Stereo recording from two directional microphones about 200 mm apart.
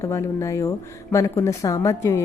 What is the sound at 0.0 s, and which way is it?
A woman's voice, 15° left (ahead or behind).